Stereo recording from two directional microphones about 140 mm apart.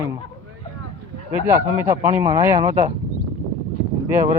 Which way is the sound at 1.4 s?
20° right (ahead or behind).